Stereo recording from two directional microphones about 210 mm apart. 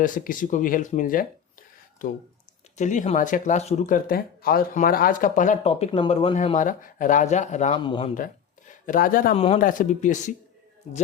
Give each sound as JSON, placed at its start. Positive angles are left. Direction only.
{"t": 0.0, "sound": "speech", "side_deg": 40}
{"t": 7.8, "sound": "speech", "side_deg": 25}
{"t": 8.9, "sound": "speech", "side_deg": 40}
{"t": 9.3, "sound": "speech", "side_deg": 30}